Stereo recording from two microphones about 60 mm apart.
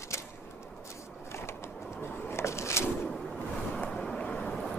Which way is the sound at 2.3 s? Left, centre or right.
Left.